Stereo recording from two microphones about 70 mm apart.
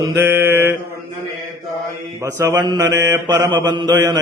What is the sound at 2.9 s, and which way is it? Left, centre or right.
Mantra, right.